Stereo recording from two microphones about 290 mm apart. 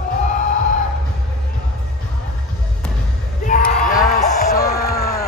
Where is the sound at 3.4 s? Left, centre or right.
Left.